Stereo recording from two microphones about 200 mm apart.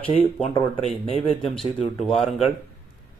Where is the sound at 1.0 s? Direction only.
25° left (ahead or behind).